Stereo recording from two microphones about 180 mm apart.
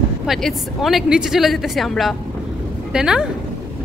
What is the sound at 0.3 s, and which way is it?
A woman's voice, centre (ahead or behind).